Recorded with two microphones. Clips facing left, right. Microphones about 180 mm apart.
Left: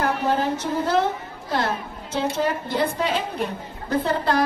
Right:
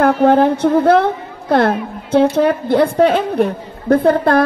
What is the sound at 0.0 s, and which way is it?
A woman's voice, 60° right (ahead or behind).